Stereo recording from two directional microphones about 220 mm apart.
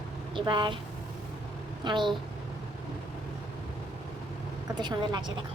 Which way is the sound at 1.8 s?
20° right (ahead or behind).